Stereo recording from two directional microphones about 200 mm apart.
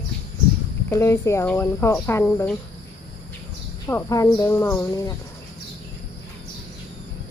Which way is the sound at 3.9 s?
15° left (ahead or behind).